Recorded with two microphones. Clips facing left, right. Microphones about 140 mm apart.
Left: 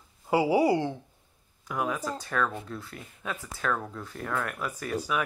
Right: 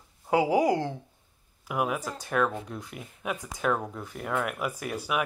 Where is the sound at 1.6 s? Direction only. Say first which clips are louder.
Right 1 dB; 10° right (ahead or behind).